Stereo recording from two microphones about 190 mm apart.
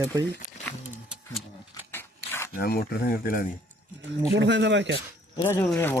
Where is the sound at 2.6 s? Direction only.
55° left (ahead or behind).